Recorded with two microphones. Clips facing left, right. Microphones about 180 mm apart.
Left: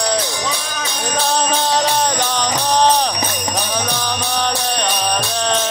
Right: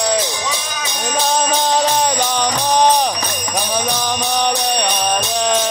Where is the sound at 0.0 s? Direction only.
15° right (ahead or behind).